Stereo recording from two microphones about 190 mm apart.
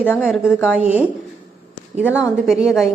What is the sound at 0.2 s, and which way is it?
Speech, 5° right (ahead or behind).